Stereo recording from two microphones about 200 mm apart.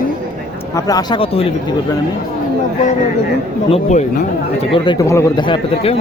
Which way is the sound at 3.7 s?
35° left (ahead or behind).